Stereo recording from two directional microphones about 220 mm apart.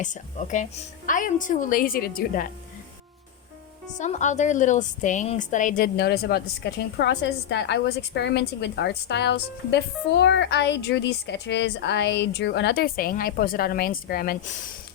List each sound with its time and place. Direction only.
0.0 s a woman's voice: 35° left (ahead or behind)
3.9 s a woman's voice: 35° left (ahead or behind)